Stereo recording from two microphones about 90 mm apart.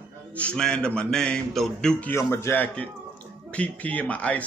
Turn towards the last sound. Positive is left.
turn(degrees=15)  # may be behind; listen again after turning